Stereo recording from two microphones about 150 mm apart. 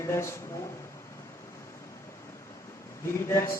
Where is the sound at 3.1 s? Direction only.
20° left (ahead or behind).